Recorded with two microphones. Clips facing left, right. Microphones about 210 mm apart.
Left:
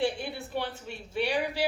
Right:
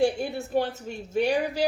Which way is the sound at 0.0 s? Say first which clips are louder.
Right 6 dB; 45° right (ahead or behind).